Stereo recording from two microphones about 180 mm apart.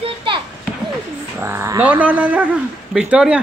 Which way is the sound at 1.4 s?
15° right (ahead or behind).